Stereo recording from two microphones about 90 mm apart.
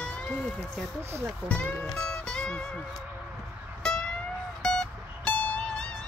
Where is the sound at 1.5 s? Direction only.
10° left (ahead or behind).